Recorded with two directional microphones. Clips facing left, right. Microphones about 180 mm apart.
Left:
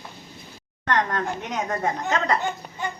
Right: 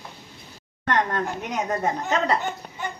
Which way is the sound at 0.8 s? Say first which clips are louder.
Even; 15° right (ahead or behind).